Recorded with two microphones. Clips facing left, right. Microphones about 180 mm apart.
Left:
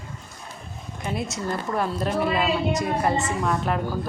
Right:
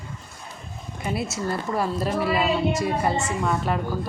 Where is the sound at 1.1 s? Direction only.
5° right (ahead or behind).